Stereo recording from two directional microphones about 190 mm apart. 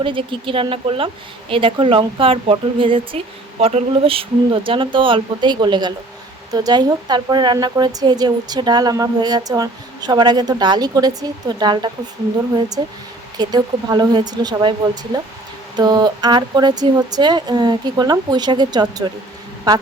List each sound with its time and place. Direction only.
0.0 s a woman's voice: 25° right (ahead or behind)